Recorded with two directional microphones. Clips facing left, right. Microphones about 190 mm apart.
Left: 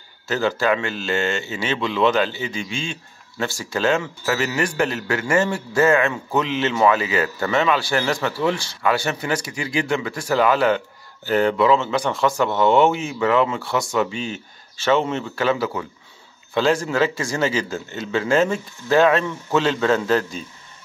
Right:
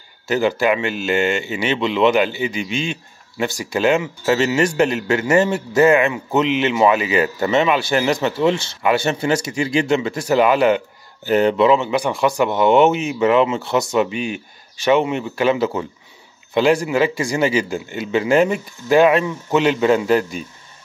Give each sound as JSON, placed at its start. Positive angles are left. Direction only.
{"t": 0.3, "sound": "speech", "side_deg": -15}